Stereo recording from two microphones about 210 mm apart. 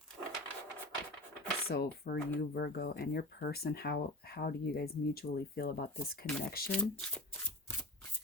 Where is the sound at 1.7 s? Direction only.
45° left (ahead or behind).